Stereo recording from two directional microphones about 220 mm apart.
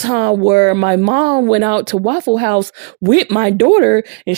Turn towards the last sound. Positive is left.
turn(degrees=-50)  # may be behind; listen again after turning